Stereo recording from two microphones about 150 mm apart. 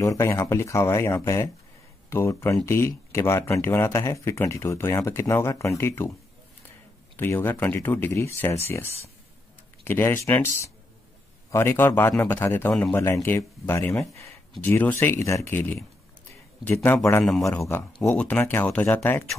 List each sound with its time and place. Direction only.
0.0 s speech: 20° left (ahead or behind)
7.2 s speech: 15° left (ahead or behind)